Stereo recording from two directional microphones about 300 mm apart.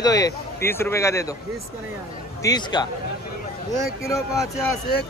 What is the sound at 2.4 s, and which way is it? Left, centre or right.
Speech, centre.